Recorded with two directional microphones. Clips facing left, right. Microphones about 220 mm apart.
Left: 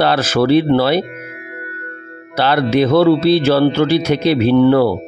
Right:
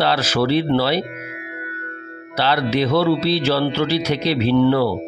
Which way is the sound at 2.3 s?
50° left (ahead or behind).